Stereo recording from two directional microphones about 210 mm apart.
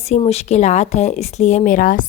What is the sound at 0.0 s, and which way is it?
A woman's voice, 30° left (ahead or behind).